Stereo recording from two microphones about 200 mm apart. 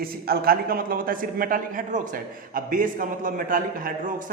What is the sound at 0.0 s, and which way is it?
A man's voice, 50° right (ahead or behind).